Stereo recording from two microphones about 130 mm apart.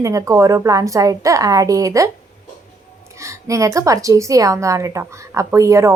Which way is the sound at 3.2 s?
25° right (ahead or behind).